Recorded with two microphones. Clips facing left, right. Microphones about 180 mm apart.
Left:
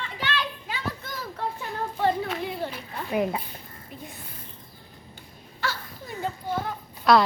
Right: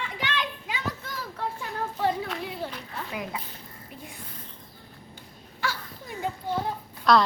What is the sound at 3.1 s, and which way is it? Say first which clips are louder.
Speech: left 11 dB; 45° left (ahead or behind).